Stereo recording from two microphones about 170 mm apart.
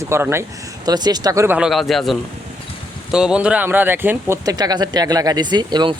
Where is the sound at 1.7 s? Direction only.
Centre (ahead or behind).